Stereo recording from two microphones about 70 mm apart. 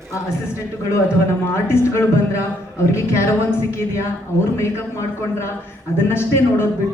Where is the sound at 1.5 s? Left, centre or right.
Left.